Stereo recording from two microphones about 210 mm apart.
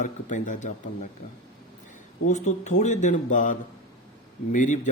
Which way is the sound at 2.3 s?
35° left (ahead or behind).